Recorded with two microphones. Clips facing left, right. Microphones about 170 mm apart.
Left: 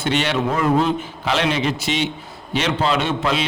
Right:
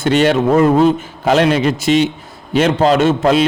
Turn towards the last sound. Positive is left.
turn(degrees=-45)  # may be behind; listen again after turning